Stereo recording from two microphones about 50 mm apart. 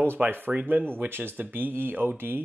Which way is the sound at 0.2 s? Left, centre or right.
Right.